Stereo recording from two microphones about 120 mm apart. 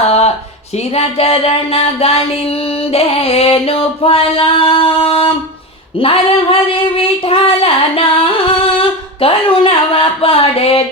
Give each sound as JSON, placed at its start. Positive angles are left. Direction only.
{"t": 0.9, "sound": "child singing", "side_deg": 55}